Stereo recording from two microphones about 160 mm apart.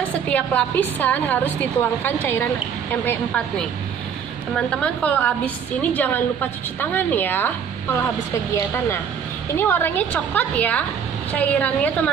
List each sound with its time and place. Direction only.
0.3 s a woman's voice: 10° left (ahead or behind)
4.6 s a woman's voice: 5° left (ahead or behind)
8.5 s a woman's voice: 15° left (ahead or behind)